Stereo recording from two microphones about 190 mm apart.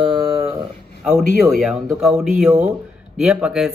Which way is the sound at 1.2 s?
60° left (ahead or behind).